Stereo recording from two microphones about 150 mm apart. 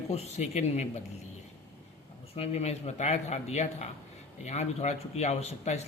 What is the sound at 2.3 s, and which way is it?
Speech, 45° left (ahead or behind).